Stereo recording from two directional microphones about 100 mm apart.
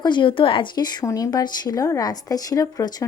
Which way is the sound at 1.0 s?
35° left (ahead or behind).